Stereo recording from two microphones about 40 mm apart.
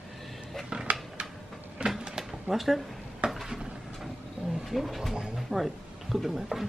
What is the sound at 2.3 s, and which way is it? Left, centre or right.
Speech, centre.